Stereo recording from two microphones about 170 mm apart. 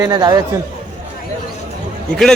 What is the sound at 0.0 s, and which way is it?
Speech, 20° right (ahead or behind).